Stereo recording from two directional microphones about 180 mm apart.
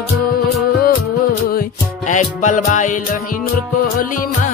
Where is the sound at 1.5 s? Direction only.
50° left (ahead or behind).